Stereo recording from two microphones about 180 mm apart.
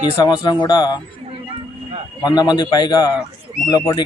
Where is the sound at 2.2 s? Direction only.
25° left (ahead or behind).